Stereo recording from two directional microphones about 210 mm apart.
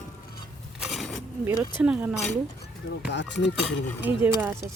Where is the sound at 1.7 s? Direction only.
5° right (ahead or behind).